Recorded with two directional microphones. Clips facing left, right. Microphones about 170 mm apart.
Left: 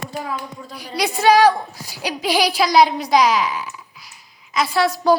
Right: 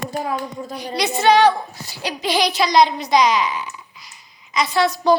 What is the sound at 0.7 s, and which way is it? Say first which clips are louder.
A woman's voice: even; 10° left (ahead or behind).